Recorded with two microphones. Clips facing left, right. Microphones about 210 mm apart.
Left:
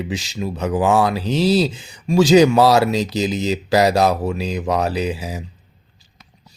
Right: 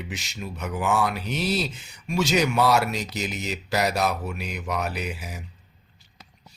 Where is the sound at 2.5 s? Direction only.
85° left.